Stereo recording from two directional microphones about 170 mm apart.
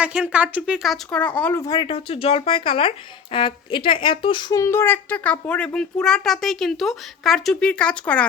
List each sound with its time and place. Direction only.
0.0 s a woman's voice: 5° right (ahead or behind)